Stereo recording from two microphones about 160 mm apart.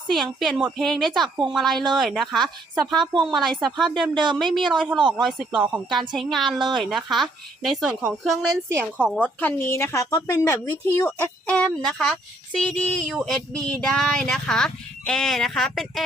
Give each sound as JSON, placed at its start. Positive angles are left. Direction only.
{"t": 0.1, "sound": "speech", "side_deg": 0}
{"t": 4.1, "sound": "speech", "side_deg": -30}
{"t": 5.5, "sound": "a woman's voice", "side_deg": -10}
{"t": 6.6, "sound": "speech", "side_deg": -30}
{"t": 6.9, "sound": "speech", "side_deg": 0}
{"t": 9.0, "sound": "a woman's voice", "side_deg": -10}
{"t": 9.4, "sound": "a woman's voice", "side_deg": 15}